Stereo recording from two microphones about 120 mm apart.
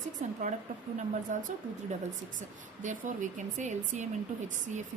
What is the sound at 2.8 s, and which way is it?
Speech, 90° right.